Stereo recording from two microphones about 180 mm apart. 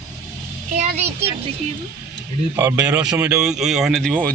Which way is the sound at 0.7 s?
40° right (ahead or behind).